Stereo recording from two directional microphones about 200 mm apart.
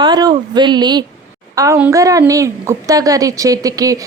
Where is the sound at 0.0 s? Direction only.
20° right (ahead or behind).